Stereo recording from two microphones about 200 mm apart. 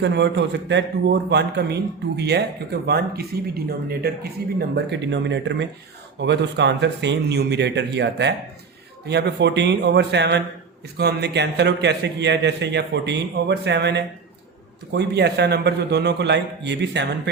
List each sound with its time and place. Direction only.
0.0 s a man's voice: 60° right (ahead or behind)